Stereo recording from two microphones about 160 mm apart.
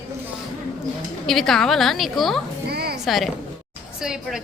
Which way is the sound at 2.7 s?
80° right.